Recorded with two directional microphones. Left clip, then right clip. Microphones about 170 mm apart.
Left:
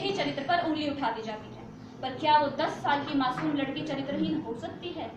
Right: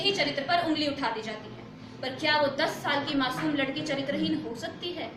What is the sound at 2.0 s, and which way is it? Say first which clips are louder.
A woman's voice: left 2 dB; 20° right (ahead or behind).